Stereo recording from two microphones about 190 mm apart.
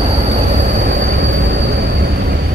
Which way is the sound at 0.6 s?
45° right (ahead or behind).